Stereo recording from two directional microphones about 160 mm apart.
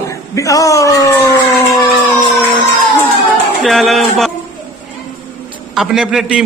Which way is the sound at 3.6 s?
Centre (ahead or behind).